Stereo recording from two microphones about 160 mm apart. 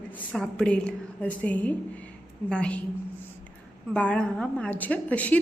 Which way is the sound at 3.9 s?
5° left (ahead or behind).